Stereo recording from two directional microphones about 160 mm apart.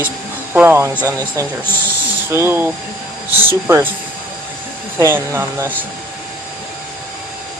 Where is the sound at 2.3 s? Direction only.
15° right (ahead or behind).